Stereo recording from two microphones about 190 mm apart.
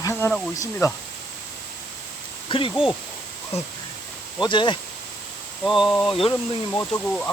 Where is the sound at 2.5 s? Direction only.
30° left (ahead or behind).